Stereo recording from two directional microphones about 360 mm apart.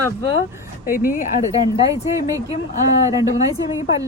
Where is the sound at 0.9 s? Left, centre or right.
Left.